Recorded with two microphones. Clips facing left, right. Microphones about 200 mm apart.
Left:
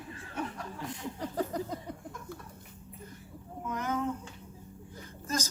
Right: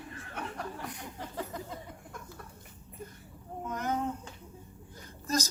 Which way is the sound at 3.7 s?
40° right (ahead or behind).